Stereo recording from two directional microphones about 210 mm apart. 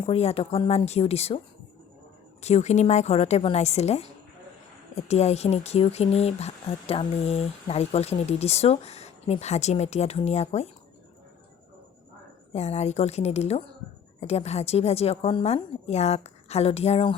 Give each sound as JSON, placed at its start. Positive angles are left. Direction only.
{"t": 0.0, "sound": "speech", "side_deg": 30}
{"t": 2.4, "sound": "speech", "side_deg": 30}
{"t": 12.5, "sound": "speech", "side_deg": 30}